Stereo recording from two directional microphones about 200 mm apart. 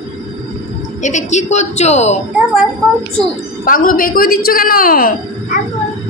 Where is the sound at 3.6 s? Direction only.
45° left (ahead or behind).